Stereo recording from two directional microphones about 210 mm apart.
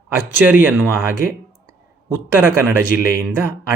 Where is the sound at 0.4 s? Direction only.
10° right (ahead or behind).